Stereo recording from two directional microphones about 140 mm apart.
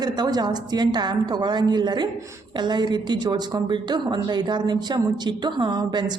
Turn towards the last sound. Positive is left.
turn(degrees=-30)  # may be behind; listen again after turning